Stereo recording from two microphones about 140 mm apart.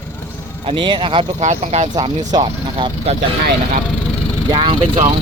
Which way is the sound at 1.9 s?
35° right (ahead or behind).